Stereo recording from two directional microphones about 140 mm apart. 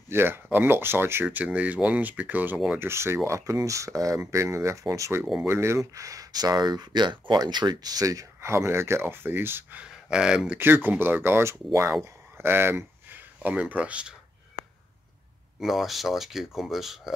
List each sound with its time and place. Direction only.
0.1 s speech: 15° right (ahead or behind)
2.8 s speech: 20° right (ahead or behind)
5.2 s speech: centre (ahead or behind)
5.5 s speech: 20° right (ahead or behind)
15.6 s speech: centre (ahead or behind)